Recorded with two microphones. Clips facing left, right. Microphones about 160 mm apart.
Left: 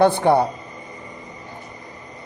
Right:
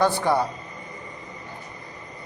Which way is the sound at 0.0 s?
55° left (ahead or behind).